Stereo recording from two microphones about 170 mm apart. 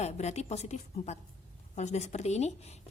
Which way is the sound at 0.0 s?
40° left (ahead or behind).